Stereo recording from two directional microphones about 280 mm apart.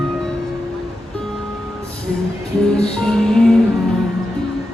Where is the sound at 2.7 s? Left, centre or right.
Centre.